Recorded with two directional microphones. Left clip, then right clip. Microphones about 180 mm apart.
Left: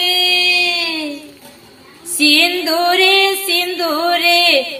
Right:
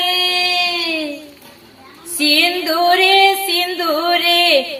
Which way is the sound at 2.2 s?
20° left (ahead or behind).